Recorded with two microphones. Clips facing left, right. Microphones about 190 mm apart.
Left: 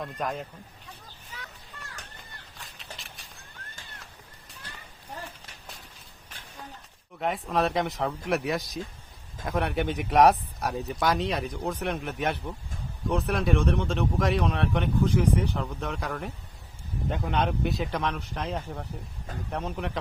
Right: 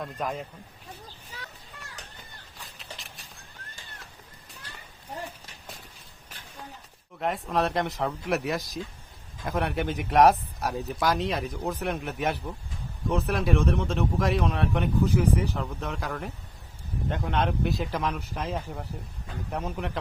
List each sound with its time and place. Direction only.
0.0 s speech: centre (ahead or behind)
2.7 s a sound: centre (ahead or behind)
7.2 s speech: centre (ahead or behind)